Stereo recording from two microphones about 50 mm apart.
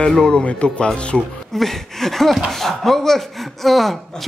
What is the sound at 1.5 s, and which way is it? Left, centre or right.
Speech, centre.